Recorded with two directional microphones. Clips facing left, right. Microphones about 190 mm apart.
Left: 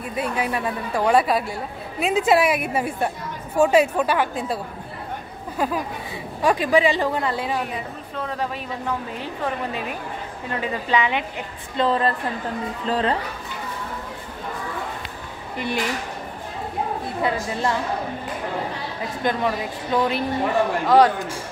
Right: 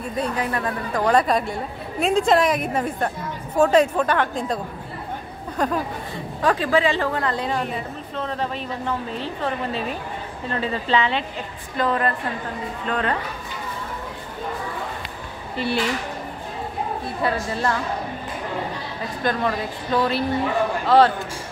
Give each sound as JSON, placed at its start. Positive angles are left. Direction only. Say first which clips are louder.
{"t": 0.1, "sound": "a woman's voice", "louder": "even", "side_deg": 10}
{"t": 5.6, "sound": "a woman's voice", "louder": "right 1 dB", "side_deg": 5}
{"t": 11.7, "sound": "a woman's voice", "louder": "left 1 dB", "side_deg": 25}
{"t": 15.5, "sound": "speech", "louder": "right 2 dB", "side_deg": 15}
{"t": 17.2, "sound": "a woman's voice", "louder": "even", "side_deg": 15}
{"t": 19.2, "sound": "a woman's voice", "louder": "even", "side_deg": 15}